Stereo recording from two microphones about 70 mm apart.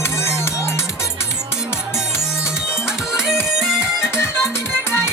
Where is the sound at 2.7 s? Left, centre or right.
Centre.